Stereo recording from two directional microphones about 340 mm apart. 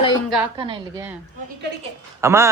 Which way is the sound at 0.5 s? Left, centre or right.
Centre.